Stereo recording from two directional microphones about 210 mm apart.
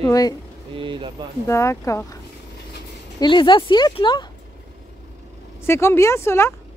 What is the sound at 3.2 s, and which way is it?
Speech, 20° left (ahead or behind).